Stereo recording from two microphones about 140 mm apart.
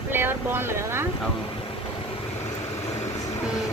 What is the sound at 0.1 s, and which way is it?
Speech, 15° right (ahead or behind).